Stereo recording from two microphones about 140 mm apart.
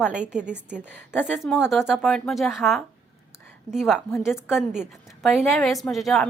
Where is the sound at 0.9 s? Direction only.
15° left (ahead or behind).